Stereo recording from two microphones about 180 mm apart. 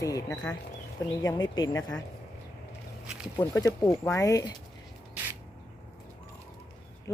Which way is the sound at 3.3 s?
20° left (ahead or behind).